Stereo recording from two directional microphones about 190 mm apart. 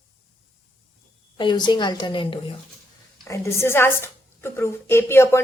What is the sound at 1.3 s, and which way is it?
A woman's voice, 25° left (ahead or behind).